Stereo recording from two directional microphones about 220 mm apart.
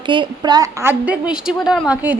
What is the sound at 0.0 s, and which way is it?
A woman's voice, 20° right (ahead or behind).